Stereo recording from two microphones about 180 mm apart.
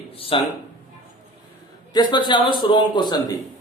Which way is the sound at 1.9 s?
25° left (ahead or behind).